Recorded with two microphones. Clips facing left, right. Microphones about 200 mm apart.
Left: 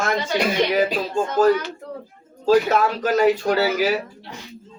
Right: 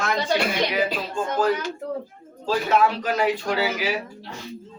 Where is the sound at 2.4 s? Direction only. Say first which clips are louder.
Left 4 dB; 40° left (ahead or behind).